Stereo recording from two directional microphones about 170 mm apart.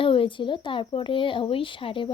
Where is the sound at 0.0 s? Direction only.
30° left (ahead or behind).